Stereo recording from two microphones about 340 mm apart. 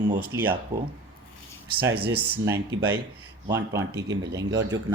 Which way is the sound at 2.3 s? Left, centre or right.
Centre.